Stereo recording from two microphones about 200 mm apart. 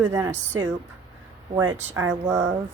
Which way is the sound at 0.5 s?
90° right.